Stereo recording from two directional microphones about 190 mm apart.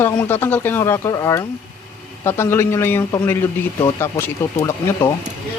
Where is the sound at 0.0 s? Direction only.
10° left (ahead or behind).